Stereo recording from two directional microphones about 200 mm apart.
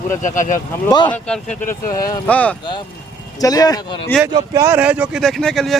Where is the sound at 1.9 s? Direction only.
15° left (ahead or behind).